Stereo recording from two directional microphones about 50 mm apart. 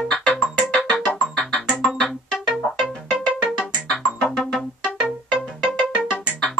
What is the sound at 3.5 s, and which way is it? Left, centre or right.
Music, centre.